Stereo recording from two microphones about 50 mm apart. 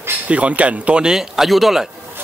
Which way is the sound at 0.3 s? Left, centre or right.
Right.